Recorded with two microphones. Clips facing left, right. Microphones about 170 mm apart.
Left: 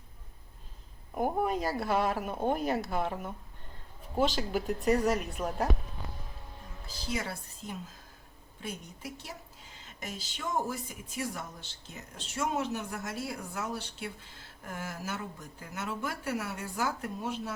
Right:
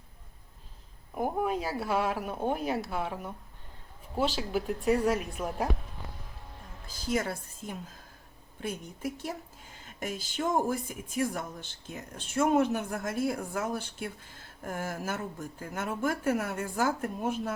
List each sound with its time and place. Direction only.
1.1 s a sound: centre (ahead or behind)
1.8 s speech: 10° right (ahead or behind)
4.2 s speech: 5° right (ahead or behind)
6.8 s speech: 50° right (ahead or behind)